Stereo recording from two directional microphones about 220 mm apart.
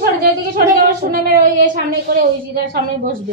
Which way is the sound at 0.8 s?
40° right (ahead or behind).